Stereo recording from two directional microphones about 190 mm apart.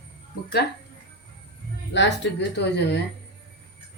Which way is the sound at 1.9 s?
70° left (ahead or behind).